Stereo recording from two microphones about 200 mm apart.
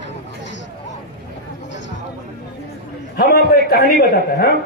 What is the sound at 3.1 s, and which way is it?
A man's voice, 50° left (ahead or behind).